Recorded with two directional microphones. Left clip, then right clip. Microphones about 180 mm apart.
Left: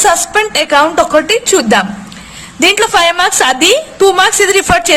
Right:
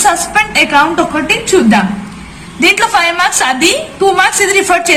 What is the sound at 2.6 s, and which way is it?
A woman's voice, 55° left (ahead or behind).